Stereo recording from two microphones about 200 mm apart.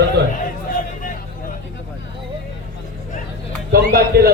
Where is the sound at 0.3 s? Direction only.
40° left (ahead or behind).